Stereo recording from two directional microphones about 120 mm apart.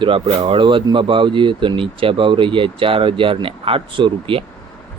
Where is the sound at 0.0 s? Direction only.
50° right (ahead or behind).